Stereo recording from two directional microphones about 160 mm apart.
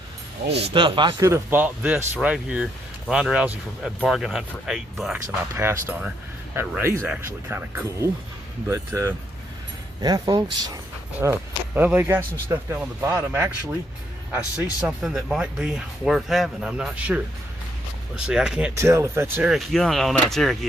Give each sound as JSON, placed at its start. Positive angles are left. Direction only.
{"t": 0.6, "sound": "speech", "side_deg": -30}
{"t": 1.2, "sound": "speech", "side_deg": -15}
{"t": 5.5, "sound": "speech", "side_deg": -15}
{"t": 11.2, "sound": "speech", "side_deg": -15}
{"t": 18.3, "sound": "speech", "side_deg": -5}
{"t": 18.7, "sound": "speech", "side_deg": -15}
{"t": 19.5, "sound": "speech", "side_deg": 0}